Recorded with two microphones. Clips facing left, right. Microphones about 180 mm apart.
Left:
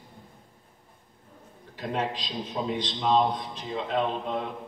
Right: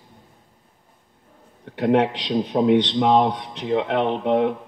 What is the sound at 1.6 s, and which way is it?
A man's voice, 70° right (ahead or behind).